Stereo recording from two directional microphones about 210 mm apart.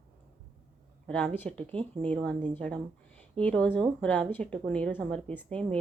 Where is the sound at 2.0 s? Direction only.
5° left (ahead or behind).